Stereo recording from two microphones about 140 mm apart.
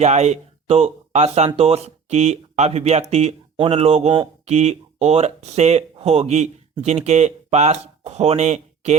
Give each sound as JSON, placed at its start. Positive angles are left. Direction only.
{"t": 0.0, "sound": "speech", "side_deg": -55}